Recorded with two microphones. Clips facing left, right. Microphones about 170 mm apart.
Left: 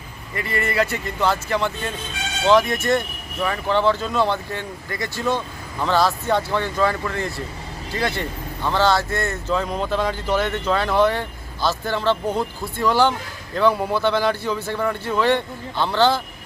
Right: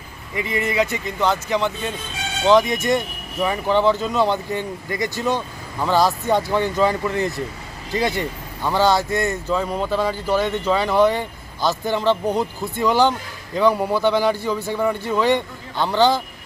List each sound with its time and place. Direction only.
0.3 s speech: 15° right (ahead or behind)